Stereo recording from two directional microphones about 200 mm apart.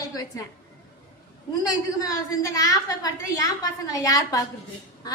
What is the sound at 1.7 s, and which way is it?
A woman's voice, 20° left (ahead or behind).